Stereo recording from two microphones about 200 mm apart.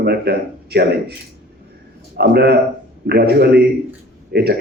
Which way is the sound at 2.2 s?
55° right (ahead or behind).